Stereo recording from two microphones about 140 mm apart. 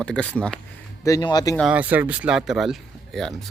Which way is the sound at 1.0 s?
25° left (ahead or behind).